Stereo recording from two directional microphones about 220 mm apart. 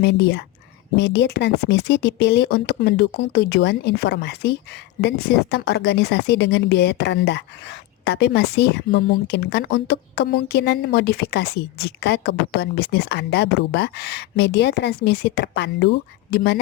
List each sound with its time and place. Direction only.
0.0 s a woman's voice: 50° left (ahead or behind)